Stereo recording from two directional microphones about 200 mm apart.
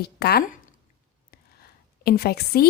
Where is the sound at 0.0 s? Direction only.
50° left (ahead or behind).